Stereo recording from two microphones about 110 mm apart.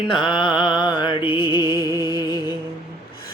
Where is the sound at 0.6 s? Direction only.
50° left (ahead or behind).